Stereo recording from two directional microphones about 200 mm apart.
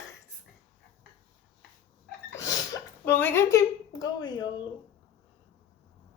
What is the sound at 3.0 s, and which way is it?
A woman's voice, 10° left (ahead or behind).